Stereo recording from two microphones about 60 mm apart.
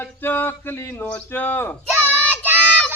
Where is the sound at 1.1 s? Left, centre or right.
Left.